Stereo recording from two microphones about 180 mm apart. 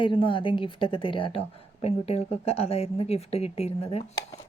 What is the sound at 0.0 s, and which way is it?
A woman's voice, 30° left (ahead or behind).